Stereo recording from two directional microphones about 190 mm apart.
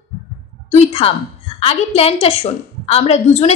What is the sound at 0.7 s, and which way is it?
A woman's voice, 35° left (ahead or behind).